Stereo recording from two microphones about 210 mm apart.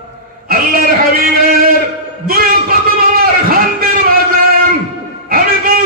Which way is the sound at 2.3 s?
45° right (ahead or behind).